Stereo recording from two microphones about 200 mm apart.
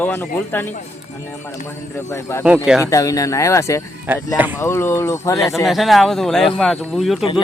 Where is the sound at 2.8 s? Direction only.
15° left (ahead or behind).